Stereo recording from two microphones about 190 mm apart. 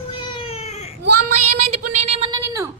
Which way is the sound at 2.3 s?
20° right (ahead or behind).